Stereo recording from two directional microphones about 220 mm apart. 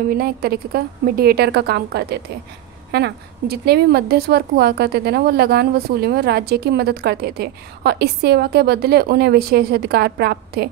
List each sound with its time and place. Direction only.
0.1 s a woman's voice: 45° right (ahead or behind)